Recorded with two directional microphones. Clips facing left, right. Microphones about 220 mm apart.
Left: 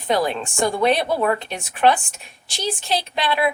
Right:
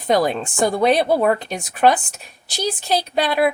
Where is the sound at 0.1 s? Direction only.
35° right (ahead or behind).